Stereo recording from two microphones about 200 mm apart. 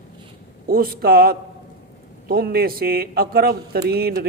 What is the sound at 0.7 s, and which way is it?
A man's voice, 45° right (ahead or behind).